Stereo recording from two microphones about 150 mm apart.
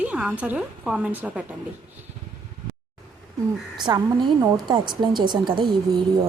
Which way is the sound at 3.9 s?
30° right (ahead or behind).